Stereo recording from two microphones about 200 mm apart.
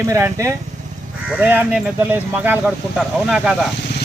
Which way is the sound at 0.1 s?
15° right (ahead or behind).